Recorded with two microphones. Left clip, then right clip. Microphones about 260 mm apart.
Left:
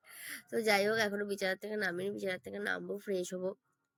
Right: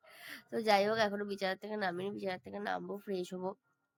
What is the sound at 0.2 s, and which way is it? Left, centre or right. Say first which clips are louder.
Speech: left 3 dB; centre.